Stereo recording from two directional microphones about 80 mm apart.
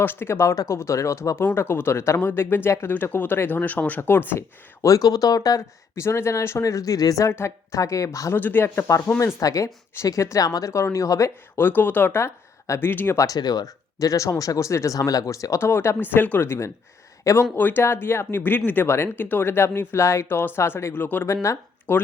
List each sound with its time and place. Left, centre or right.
0.0 s speech: left
2.9 s speech: left
4.8 s speech: left
6.0 s speech: left
7.3 s speech: left
8.4 s speech: left
11.5 s speech: left
12.9 s speech: left
13.1 s speech: left
17.6 s speech: left
20.2 s speech: left
20.6 s speech: left
21.4 s speech: left